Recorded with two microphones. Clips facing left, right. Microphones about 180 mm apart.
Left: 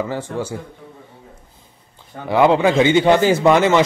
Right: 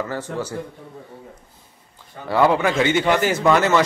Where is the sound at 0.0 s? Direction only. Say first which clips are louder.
Left 3 dB; 10° left (ahead or behind).